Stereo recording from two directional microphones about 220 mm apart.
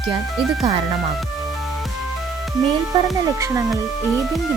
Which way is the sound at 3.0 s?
15° right (ahead or behind).